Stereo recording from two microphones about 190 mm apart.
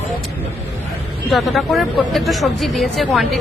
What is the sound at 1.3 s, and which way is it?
Speech, centre (ahead or behind).